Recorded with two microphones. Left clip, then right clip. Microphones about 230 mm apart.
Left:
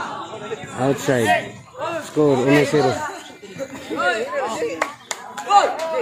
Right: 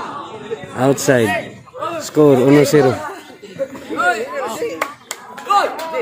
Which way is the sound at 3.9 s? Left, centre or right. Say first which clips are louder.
Right 3 dB; right.